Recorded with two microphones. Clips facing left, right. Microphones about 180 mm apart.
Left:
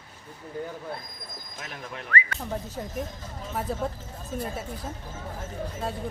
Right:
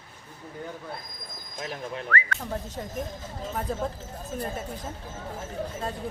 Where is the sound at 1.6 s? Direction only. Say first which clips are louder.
Right 6 dB; 30° right (ahead or behind).